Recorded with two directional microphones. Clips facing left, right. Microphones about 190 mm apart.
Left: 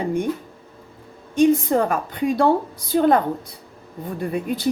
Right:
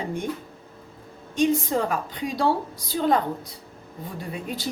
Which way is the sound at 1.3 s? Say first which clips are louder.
Left 6 dB; 55° left (ahead or behind).